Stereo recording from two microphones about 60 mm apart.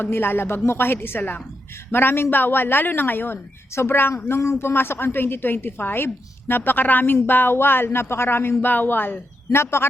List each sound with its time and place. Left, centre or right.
0.0 s a woman's voice: left